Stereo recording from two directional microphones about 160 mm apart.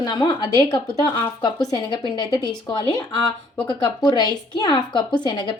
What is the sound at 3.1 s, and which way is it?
Speech, 5° left (ahead or behind).